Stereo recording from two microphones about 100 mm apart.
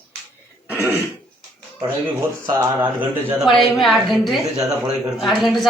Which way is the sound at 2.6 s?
20° right (ahead or behind).